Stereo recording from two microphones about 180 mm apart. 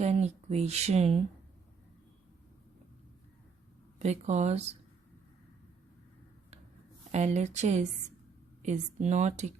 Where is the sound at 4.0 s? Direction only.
40° right (ahead or behind).